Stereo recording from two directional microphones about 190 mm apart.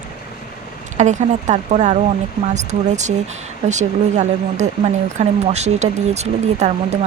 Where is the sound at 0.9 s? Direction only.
40° right (ahead or behind).